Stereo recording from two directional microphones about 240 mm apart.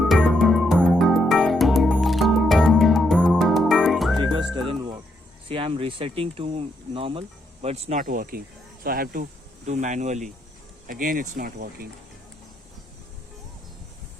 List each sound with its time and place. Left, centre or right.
0.0 s music: centre
4.5 s music: centre
5.5 s speech: right